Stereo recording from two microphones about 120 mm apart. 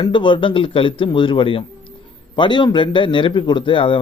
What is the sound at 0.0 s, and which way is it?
A man's voice, 40° left (ahead or behind).